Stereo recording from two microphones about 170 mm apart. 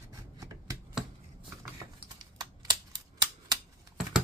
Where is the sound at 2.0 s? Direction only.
25° right (ahead or behind).